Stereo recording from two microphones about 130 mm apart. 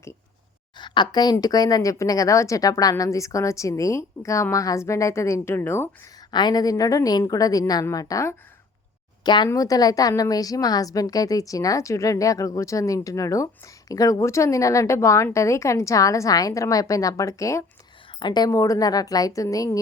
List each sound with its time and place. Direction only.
0.8 s a woman's voice: 35° left (ahead or behind); by 5.9 s 20° left (ahead or behind)
6.3 s a woman's voice: 30° left (ahead or behind)
9.2 s a woman's voice: 35° left (ahead or behind)
18.2 s a woman's voice: 35° left (ahead or behind)